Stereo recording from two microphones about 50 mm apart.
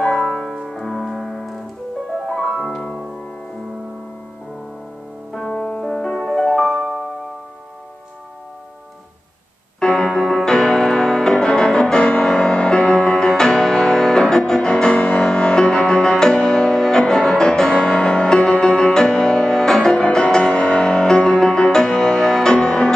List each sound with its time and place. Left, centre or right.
0.0 s music: centre
0.7 s piano: centre
2.1 s music: centre
5.5 s music: left
9.8 s music: centre